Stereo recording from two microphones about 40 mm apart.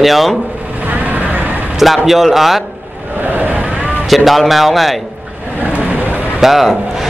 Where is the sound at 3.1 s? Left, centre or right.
Right.